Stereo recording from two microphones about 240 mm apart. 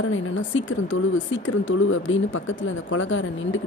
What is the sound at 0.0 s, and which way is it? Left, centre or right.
A woman's voice, left.